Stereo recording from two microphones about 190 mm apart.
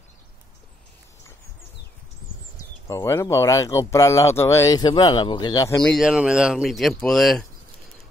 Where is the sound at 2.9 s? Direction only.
15° left (ahead or behind).